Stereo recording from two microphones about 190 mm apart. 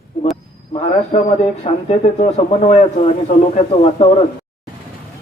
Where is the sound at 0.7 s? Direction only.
30° left (ahead or behind).